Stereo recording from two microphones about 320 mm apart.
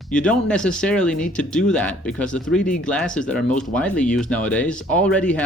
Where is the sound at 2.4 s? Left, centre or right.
Left.